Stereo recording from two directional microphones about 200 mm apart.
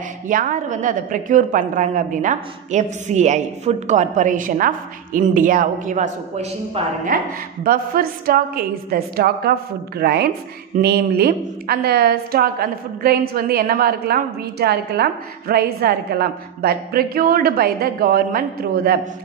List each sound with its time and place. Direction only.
0.3 s a woman's voice: 40° right (ahead or behind)
7.6 s a woman's voice: 45° right (ahead or behind)